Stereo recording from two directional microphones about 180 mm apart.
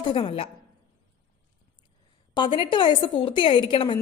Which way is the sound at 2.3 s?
25° left (ahead or behind).